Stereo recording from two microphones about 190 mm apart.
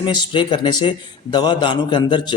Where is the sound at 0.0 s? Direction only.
25° left (ahead or behind).